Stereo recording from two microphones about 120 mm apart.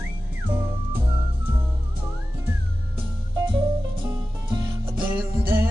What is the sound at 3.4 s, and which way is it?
Music, 40° right (ahead or behind).